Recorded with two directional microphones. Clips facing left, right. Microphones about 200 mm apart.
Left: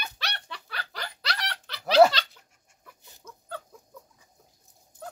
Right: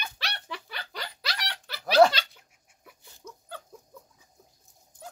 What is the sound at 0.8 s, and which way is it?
Snicker, 20° right (ahead or behind).